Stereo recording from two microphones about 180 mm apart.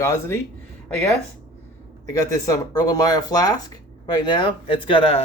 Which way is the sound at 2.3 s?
20° left (ahead or behind).